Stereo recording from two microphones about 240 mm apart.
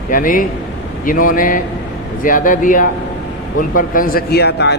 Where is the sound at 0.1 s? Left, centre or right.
Left.